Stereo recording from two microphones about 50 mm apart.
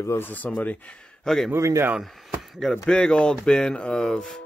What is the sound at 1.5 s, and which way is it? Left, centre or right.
Speech, right.